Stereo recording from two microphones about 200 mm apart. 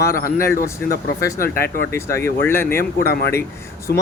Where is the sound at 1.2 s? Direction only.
15° left (ahead or behind).